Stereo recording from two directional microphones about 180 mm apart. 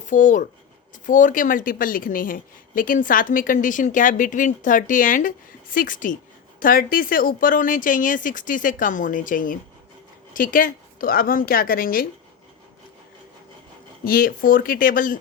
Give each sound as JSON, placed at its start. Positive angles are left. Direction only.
{"t": 0.0, "sound": "a woman's voice", "side_deg": 45}
{"t": 14.0, "sound": "a woman's voice", "side_deg": 50}